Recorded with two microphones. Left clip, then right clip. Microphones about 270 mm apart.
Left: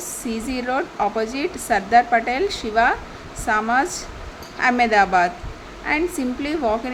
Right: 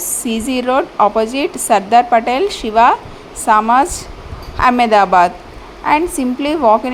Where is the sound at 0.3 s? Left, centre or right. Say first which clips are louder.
Right 8 dB; centre.